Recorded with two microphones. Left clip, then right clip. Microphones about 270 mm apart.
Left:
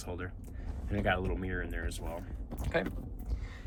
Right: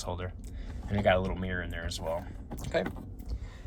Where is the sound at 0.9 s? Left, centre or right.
Centre.